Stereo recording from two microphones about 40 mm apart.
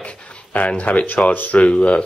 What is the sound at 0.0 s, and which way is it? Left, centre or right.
Speech, left.